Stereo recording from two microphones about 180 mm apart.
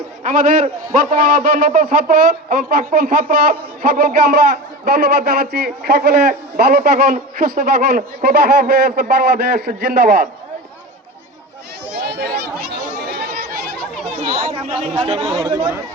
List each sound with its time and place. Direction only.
0.2 s a man's voice: 45° right (ahead or behind); by 10.2 s 60° right (ahead or behind)
12.0 s chatter: 65° right (ahead or behind)
14.3 s speech: 30° right (ahead or behind)
15.4 s speech: 20° right (ahead or behind)